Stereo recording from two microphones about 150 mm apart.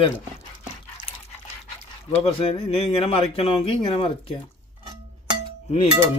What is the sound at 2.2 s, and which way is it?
Speech, 40° left (ahead or behind).